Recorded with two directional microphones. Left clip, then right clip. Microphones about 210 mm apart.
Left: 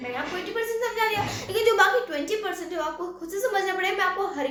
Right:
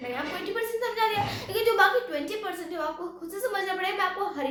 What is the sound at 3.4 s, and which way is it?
A woman's voice, 15° left (ahead or behind).